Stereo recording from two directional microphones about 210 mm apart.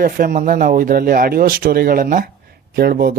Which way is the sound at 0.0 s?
45° right (ahead or behind).